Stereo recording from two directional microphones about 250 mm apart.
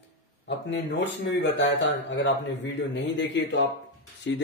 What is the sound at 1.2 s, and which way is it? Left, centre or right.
Speech, left.